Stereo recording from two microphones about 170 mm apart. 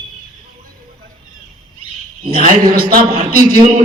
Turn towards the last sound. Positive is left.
turn(degrees=-60)  # may be behind; listen again after turning